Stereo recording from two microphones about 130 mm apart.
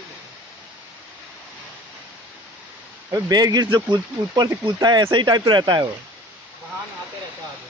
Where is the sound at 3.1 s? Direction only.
30° right (ahead or behind).